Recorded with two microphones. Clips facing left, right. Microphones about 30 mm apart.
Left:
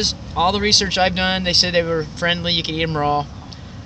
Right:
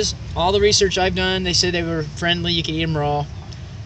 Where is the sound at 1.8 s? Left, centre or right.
Centre.